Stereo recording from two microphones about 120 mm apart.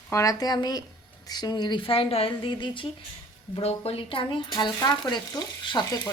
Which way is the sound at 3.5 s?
55° left (ahead or behind).